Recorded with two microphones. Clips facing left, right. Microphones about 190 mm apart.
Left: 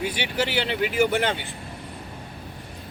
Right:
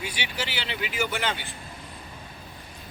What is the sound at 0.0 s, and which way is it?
Speech, 55° left (ahead or behind).